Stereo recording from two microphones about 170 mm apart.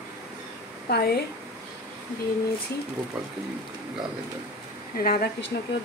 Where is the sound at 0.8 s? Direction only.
65° left (ahead or behind).